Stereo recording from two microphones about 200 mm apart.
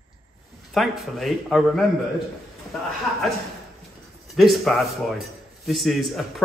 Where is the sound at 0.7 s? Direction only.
Centre (ahead or behind).